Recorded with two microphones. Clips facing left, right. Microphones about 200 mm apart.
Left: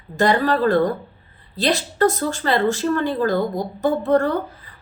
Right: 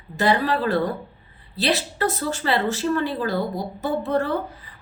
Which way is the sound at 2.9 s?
45° left (ahead or behind).